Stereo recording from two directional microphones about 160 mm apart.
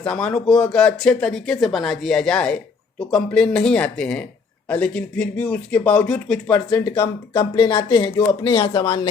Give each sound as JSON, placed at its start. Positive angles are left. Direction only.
{"t": 0.0, "sound": "speech", "side_deg": 5}
{"t": 6.7, "sound": "speech", "side_deg": 20}